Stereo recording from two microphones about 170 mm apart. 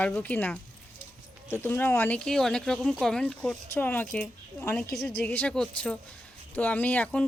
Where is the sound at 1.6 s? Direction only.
10° left (ahead or behind).